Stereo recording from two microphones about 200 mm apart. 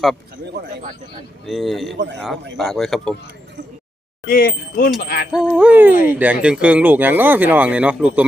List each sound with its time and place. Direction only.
0.6 s speech: 55° right (ahead or behind)
1.5 s a man's voice: centre (ahead or behind)
4.3 s speech: 45° left (ahead or behind)
5.3 s a man's voice: 5° right (ahead or behind)